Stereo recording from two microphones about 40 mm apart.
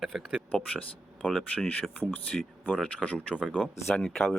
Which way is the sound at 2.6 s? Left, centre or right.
Left.